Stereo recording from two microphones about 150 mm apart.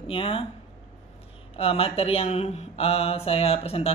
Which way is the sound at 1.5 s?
40° left (ahead or behind).